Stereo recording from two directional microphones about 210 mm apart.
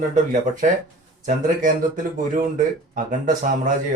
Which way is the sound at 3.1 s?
40° right (ahead or behind).